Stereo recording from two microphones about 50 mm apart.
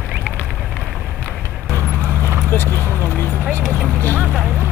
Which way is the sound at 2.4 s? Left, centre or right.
Left.